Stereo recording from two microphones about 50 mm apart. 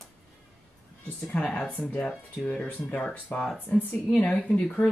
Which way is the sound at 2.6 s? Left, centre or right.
Left.